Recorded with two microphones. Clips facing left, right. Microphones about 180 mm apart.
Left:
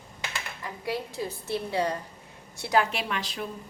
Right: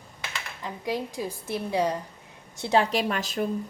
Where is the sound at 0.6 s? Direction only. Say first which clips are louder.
Right 3 dB; 15° right (ahead or behind).